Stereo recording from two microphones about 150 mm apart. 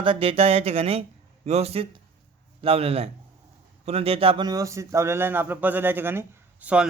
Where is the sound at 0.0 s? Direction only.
35° right (ahead or behind).